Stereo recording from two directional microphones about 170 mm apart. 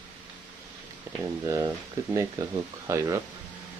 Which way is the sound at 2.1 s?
20° right (ahead or behind).